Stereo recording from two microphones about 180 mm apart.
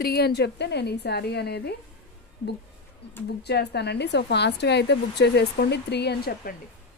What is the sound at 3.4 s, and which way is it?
A woman's voice, 65° left (ahead or behind).